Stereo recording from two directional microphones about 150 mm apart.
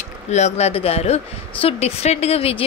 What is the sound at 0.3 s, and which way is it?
Speech, 50° left (ahead or behind).